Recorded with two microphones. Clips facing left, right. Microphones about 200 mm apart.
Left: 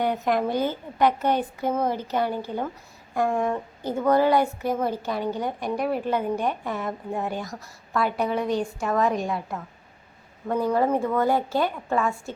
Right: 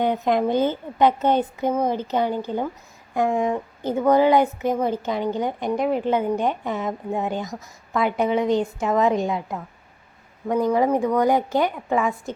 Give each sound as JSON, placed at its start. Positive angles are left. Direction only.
{"t": 0.0, "sound": "a woman's voice", "side_deg": -20}